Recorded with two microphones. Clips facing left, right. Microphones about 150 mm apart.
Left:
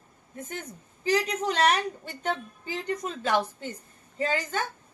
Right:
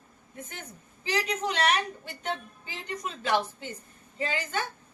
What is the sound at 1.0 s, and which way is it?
A woman's voice, 40° left (ahead or behind).